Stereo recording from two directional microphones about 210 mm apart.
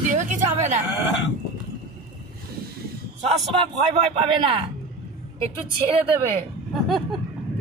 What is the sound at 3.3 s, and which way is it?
Speech, 30° right (ahead or behind).